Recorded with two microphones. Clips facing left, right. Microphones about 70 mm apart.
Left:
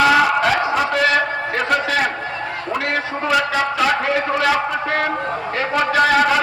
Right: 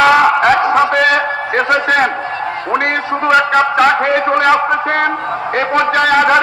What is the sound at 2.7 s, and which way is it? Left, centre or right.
A man's voice, right.